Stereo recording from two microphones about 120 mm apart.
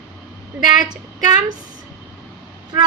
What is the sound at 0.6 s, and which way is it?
Speech, 35° right (ahead or behind).